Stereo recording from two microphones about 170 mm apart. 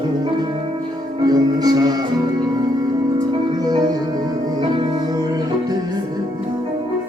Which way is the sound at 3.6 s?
25° right (ahead or behind).